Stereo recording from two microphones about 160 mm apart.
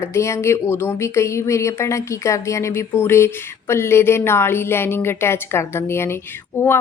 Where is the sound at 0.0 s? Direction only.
15° left (ahead or behind).